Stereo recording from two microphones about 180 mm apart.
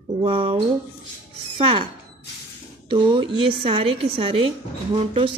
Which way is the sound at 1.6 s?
30° right (ahead or behind).